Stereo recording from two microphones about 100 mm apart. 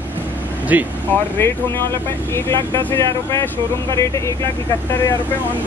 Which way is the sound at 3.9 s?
30° left (ahead or behind).